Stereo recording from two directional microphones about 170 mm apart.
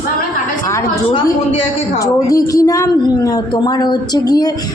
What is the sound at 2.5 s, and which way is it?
A woman's voice, 20° left (ahead or behind).